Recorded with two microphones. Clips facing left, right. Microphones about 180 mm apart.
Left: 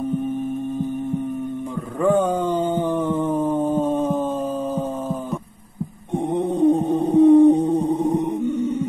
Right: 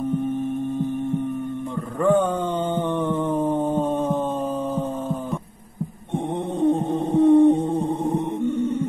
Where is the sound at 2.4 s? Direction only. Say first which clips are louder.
Left 3 dB; centre (ahead or behind).